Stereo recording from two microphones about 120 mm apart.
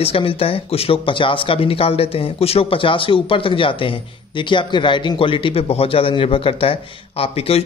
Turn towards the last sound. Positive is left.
turn(degrees=55)  # may be behind; listen again after turning